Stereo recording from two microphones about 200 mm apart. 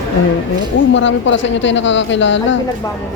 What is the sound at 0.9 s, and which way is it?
Speech, 65° left (ahead or behind).